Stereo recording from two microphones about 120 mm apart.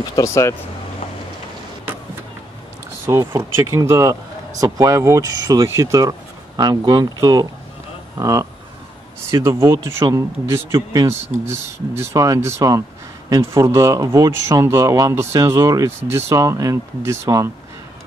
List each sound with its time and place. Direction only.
0.1 s speech: 25° left (ahead or behind)
3.3 s speech: 20° right (ahead or behind)